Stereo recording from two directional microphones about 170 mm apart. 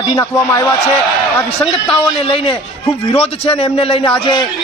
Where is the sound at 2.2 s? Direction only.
30° left (ahead or behind).